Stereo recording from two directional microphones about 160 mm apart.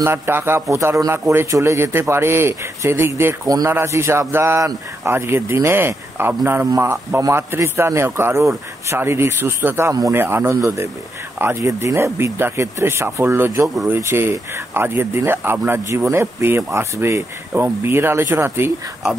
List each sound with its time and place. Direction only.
0.0 s a man's voice: 15° right (ahead or behind)